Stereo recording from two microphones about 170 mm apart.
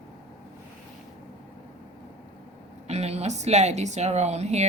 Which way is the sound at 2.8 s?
40° right (ahead or behind).